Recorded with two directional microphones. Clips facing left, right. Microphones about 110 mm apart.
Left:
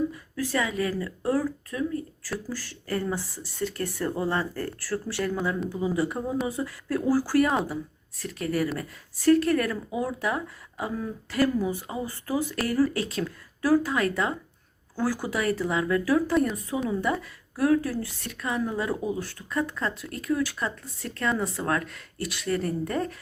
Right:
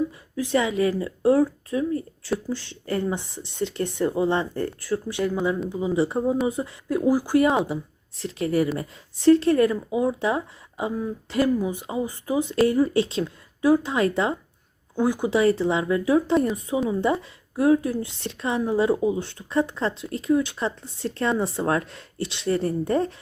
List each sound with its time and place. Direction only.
0.3 s a woman's voice: 20° right (ahead or behind)